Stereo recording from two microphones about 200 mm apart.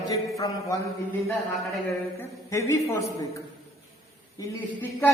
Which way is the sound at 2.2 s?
15° left (ahead or behind).